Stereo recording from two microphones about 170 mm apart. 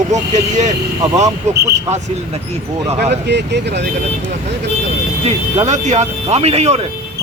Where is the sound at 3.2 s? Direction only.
90° right.